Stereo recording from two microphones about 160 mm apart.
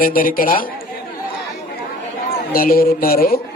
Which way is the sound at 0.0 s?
60° left (ahead or behind).